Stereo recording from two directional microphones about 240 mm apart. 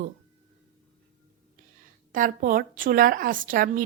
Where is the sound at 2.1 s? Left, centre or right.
Right.